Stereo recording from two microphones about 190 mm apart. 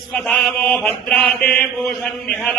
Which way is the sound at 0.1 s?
5° left (ahead or behind).